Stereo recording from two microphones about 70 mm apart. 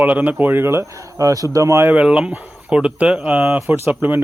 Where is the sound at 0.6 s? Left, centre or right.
Right.